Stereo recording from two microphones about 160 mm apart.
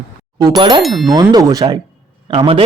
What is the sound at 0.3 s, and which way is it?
Speech, 25° right (ahead or behind).